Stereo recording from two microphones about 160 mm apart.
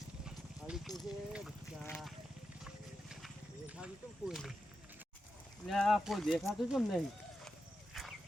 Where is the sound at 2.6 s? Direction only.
Centre (ahead or behind).